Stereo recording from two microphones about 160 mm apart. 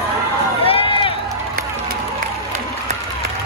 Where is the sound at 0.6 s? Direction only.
35° left (ahead or behind).